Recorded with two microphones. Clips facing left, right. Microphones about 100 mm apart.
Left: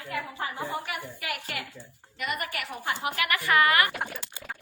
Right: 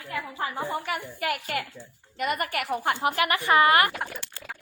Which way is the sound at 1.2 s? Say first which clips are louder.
Right 6 dB; 45° right (ahead or behind).